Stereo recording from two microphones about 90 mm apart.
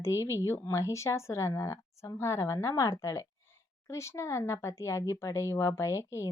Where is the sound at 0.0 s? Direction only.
35° left (ahead or behind).